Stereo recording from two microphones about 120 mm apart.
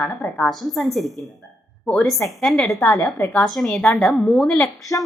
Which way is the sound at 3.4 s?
Centre (ahead or behind).